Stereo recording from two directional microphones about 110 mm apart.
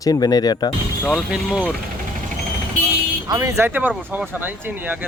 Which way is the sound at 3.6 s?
15° right (ahead or behind).